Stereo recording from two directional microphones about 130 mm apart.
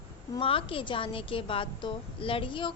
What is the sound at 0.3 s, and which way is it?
A woman's voice, 45° left (ahead or behind).